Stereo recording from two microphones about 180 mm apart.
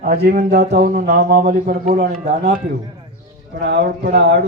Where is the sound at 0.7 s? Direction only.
45° right (ahead or behind).